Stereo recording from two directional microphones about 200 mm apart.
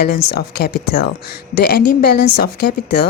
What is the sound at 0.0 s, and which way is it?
Speech, 50° left (ahead or behind).